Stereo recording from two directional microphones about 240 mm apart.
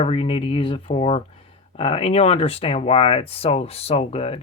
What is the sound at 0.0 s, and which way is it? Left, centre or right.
Speech, left.